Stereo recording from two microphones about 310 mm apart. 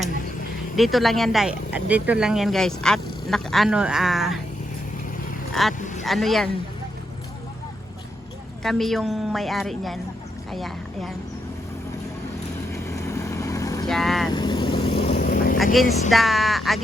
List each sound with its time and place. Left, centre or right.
0.8 s speech: centre
6.0 s speech: centre
8.6 s speech: centre
12.7 s vehicle: centre
13.9 s speech: centre
14.3 s vehicle: centre
15.5 s speech: centre